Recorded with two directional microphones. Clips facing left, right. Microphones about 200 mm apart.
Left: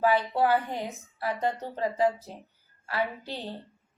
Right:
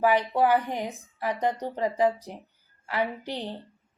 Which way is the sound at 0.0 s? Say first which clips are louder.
Right 2 dB; 15° right (ahead or behind).